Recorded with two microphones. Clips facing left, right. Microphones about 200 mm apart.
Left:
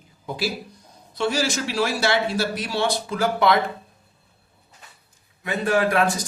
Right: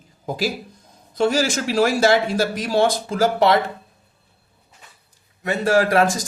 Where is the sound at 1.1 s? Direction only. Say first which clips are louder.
Right 4 dB; 45° right (ahead or behind).